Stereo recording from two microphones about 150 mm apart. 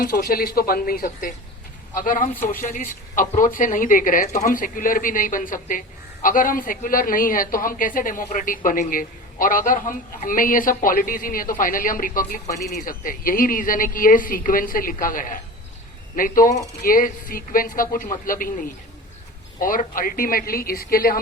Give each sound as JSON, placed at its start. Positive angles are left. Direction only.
{"t": 0.0, "sound": "a woman's voice", "side_deg": 85}